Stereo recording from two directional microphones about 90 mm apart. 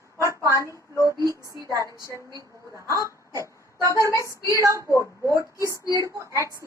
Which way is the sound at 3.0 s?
35° right (ahead or behind).